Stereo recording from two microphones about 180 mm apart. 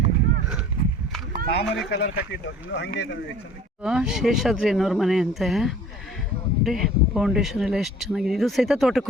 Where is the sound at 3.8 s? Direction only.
5° right (ahead or behind).